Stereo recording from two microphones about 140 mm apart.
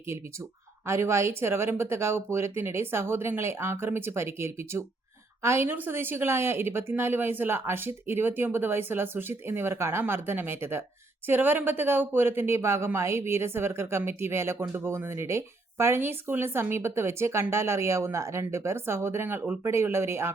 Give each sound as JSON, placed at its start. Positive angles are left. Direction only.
{"t": 0.9, "sound": "speech", "side_deg": -20}